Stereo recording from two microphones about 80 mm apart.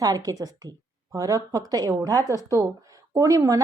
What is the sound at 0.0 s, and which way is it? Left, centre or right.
A woman's voice, right.